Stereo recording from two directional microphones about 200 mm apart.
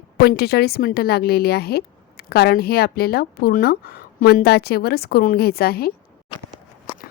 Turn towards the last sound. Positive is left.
turn(degrees=50)  # may be behind; listen again after turning